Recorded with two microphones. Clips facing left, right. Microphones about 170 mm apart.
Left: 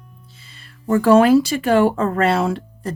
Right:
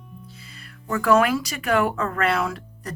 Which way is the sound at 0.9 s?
30° left (ahead or behind).